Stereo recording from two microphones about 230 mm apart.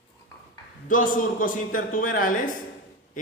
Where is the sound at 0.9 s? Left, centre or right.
Left.